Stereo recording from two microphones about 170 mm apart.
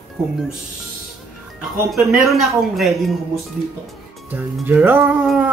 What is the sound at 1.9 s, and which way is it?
Speech, centre (ahead or behind).